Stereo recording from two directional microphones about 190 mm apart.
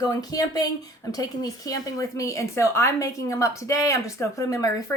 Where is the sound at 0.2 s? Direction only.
20° left (ahead or behind).